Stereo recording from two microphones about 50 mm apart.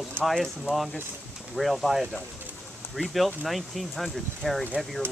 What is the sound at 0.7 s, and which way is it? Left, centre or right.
Speech, centre.